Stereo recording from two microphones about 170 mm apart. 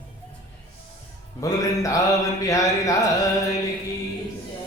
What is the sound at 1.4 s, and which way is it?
Speech, 20° left (ahead or behind).